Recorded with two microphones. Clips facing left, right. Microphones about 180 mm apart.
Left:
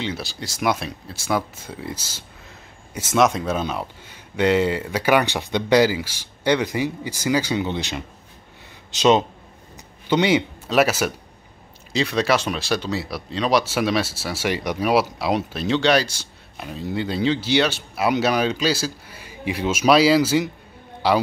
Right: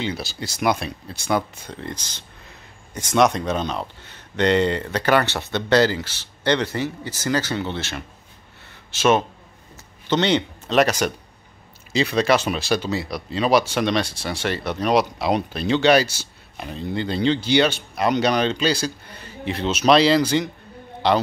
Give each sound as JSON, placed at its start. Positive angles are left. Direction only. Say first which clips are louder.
{"t": 0.0, "sound": "a man's voice", "louder": "right 1 dB", "side_deg": 0}